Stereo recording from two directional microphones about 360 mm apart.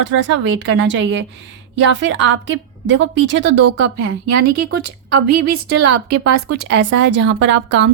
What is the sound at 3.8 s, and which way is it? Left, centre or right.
Speech, right.